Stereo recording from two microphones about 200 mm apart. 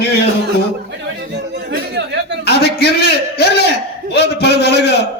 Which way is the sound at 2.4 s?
55° left (ahead or behind).